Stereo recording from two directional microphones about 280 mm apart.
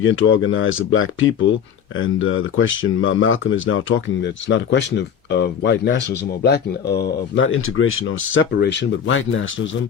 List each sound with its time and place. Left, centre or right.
0.0 s speech: left